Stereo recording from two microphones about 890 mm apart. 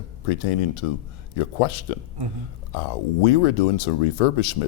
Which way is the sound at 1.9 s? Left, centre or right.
Left.